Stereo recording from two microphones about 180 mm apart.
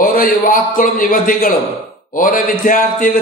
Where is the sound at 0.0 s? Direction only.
50° left (ahead or behind).